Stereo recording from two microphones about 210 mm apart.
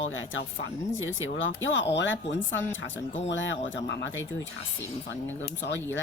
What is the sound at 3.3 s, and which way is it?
Speech, 60° left (ahead or behind).